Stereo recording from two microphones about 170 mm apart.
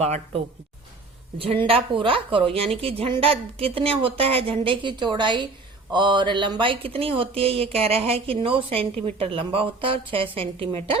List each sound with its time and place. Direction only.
0.0 s speech: 40° right (ahead or behind)
1.5 s speech: 30° right (ahead or behind)